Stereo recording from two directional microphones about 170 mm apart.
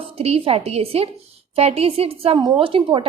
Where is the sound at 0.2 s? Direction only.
35° right (ahead or behind).